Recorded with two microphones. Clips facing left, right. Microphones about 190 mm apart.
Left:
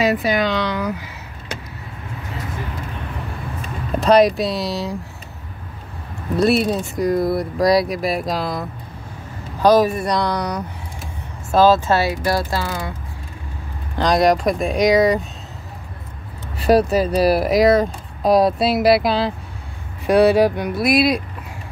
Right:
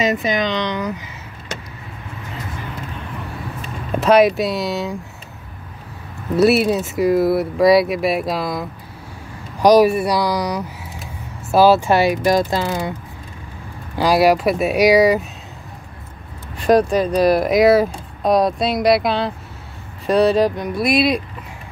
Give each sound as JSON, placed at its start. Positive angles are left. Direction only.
{"t": 0.0, "sound": "speech", "side_deg": 5}
{"t": 4.0, "sound": "speech", "side_deg": -5}
{"t": 6.3, "sound": "speech", "side_deg": -5}
{"t": 9.6, "sound": "speech", "side_deg": -15}
{"t": 13.9, "sound": "speech", "side_deg": -5}
{"t": 16.6, "sound": "speech", "side_deg": 5}